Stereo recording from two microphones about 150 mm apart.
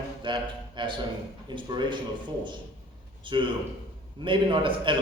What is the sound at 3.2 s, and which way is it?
A man's voice, 35° right (ahead or behind).